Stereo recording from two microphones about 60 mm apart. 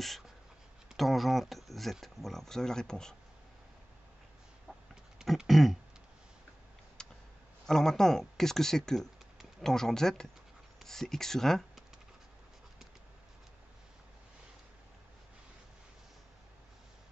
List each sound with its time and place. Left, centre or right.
0.9 s speech: centre
5.2 s speech: centre
7.0 s a sound: centre
7.6 s speech: centre